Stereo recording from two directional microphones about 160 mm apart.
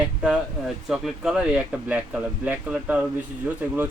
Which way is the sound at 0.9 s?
Centre (ahead or behind).